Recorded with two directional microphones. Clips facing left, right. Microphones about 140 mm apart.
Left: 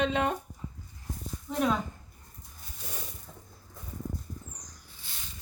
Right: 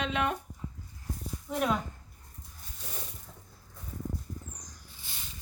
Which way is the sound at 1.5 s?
5° right (ahead or behind).